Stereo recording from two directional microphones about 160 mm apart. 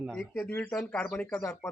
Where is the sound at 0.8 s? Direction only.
5° left (ahead or behind).